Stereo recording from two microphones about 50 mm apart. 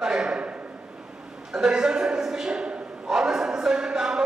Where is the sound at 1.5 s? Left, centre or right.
Centre.